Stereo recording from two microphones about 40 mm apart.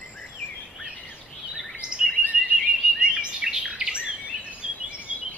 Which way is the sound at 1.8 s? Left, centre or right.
Right.